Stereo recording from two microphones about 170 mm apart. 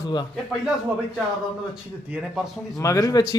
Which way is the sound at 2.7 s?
20° left (ahead or behind).